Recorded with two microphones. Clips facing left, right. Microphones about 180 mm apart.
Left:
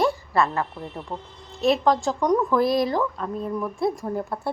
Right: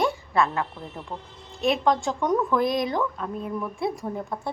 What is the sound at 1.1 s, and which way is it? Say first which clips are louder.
Speech: left 2 dB; 25° left (ahead or behind).